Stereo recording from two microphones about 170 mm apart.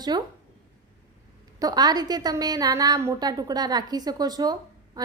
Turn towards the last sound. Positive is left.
turn(degrees=-25)  # may be behind; listen again after turning